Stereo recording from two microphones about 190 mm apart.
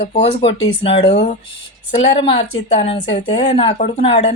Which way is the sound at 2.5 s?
30° left (ahead or behind).